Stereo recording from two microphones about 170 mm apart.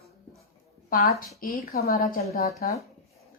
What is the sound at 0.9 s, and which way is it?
A woman's voice, 55° left (ahead or behind).